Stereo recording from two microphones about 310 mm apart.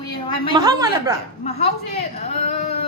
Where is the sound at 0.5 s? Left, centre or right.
Centre.